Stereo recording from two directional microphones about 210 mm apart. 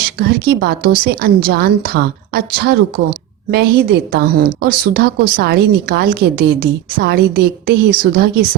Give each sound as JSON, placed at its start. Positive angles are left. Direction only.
{"t": 0.2, "sound": "a woman's voice", "side_deg": -50}